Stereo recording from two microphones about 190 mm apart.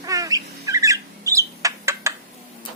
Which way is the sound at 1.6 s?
15° right (ahead or behind).